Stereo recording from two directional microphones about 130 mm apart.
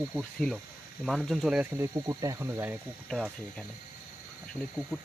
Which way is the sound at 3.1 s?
Centre (ahead or behind).